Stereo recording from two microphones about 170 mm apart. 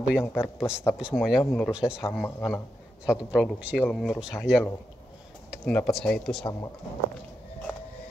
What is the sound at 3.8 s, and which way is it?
A man's voice, 5° left (ahead or behind).